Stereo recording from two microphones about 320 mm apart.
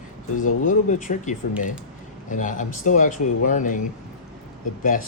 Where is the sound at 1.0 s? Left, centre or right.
Left.